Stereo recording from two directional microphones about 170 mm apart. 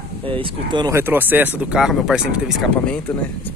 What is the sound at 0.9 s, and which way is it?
Speech, 10° right (ahead or behind).